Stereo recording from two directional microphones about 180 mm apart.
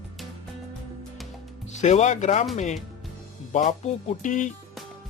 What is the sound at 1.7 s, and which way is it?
Speech, 40° left (ahead or behind).